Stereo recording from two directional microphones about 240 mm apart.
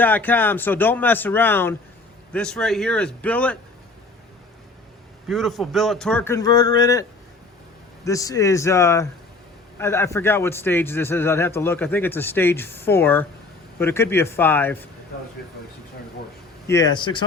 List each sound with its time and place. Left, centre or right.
0.0 s a man's voice: centre
5.3 s a man's voice: centre
8.0 s a man's voice: centre
16.6 s speech: centre